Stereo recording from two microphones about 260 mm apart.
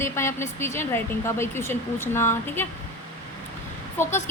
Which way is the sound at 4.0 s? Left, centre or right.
Centre.